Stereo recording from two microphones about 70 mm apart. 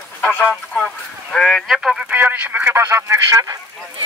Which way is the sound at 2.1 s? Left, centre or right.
Right.